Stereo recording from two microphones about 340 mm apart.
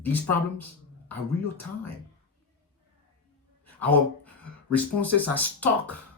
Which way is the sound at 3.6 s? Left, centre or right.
Centre.